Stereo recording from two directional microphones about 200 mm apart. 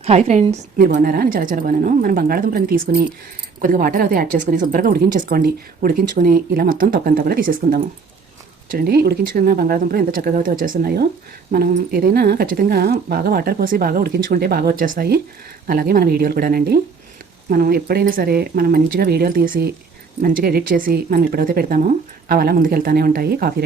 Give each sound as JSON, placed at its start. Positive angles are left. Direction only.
{"t": 0.0, "sound": "a woman's voice", "side_deg": -30}
{"t": 0.9, "sound": "a woman's voice", "side_deg": -55}